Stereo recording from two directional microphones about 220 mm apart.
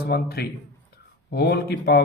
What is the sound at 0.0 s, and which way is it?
Speech, 45° left (ahead or behind).